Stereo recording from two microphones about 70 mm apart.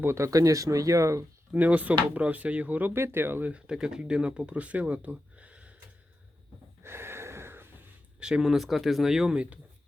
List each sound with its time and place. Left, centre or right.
0.0 s speech: right
1.5 s speech: right
2.9 s speech: right
3.5 s speech: centre
6.8 s gasp: right
8.2 s speech: centre